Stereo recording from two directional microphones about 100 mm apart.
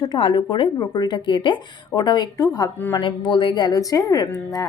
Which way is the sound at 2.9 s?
50° left (ahead or behind).